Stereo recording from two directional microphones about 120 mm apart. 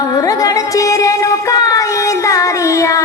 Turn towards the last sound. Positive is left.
turn(degrees=25)  # may be behind; listen again after turning